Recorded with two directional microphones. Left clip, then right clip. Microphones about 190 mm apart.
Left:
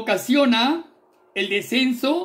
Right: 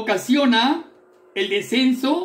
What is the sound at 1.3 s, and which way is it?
Speech, 55° left (ahead or behind).